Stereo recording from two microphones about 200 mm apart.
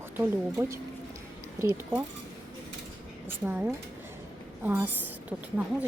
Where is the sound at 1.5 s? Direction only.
15° right (ahead or behind).